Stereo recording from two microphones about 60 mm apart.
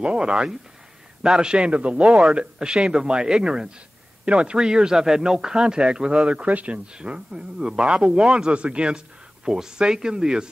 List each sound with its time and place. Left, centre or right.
0.0 s speech: centre